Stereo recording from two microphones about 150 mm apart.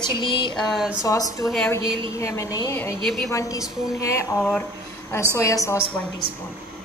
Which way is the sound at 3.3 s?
20° left (ahead or behind).